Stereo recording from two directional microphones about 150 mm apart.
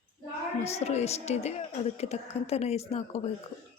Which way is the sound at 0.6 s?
45° left (ahead or behind).